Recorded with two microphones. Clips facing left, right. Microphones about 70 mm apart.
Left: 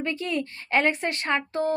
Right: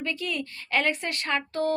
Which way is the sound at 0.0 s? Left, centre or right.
Left.